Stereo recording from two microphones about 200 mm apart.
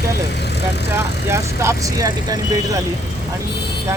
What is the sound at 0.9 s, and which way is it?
Speech, 15° right (ahead or behind).